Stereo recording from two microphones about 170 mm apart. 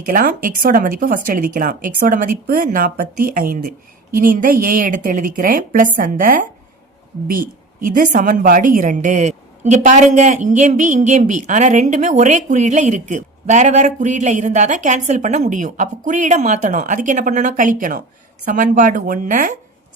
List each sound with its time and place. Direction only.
0.0 s a woman's voice: 55° right (ahead or behind)